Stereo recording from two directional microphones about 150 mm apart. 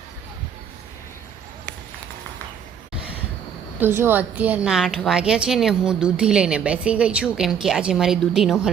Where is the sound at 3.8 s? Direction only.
15° right (ahead or behind).